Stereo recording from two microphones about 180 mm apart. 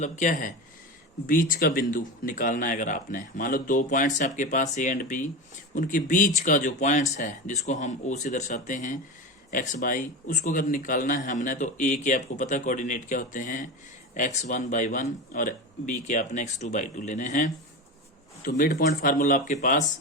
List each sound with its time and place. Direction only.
0.0 s a man's voice: 45° left (ahead or behind)